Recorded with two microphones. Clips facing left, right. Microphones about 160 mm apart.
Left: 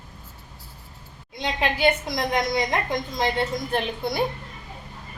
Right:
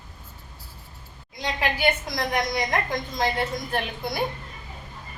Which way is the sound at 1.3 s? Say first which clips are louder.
Left 2 dB; 25° left (ahead or behind).